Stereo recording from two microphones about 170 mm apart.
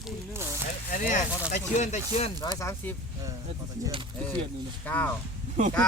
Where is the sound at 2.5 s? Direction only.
15° left (ahead or behind).